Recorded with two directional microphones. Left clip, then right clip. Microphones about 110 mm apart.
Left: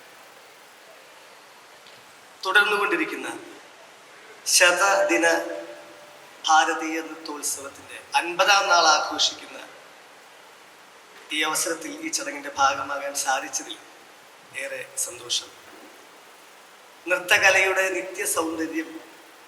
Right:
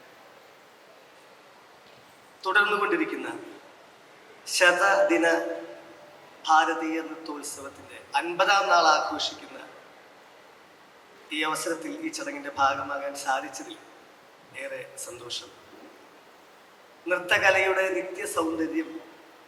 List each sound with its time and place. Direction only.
2.4 s a man's voice: 15° right (ahead or behind)
4.5 s a man's voice: 20° right (ahead or behind)
11.3 s a man's voice: 15° right (ahead or behind)
12.3 s a man's voice: 30° right (ahead or behind)
12.5 s a man's voice: 15° right (ahead or behind)
17.1 s a man's voice: 15° right (ahead or behind)